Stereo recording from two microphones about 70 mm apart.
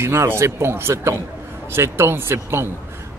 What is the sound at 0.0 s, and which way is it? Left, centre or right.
Speech, right.